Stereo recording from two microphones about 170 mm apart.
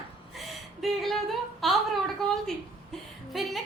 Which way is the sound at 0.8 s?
Centre (ahead or behind).